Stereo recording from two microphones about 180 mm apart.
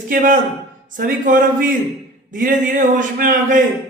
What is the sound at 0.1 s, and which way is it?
A man's voice, 50° right (ahead or behind).